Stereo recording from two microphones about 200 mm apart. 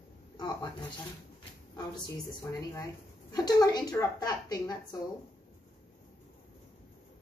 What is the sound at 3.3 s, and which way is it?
A woman's voice, 20° left (ahead or behind).